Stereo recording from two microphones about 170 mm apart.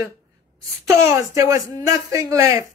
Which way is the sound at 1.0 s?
15° right (ahead or behind).